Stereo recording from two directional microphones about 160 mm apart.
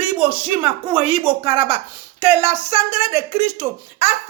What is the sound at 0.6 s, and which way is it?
Speech, 30° right (ahead or behind).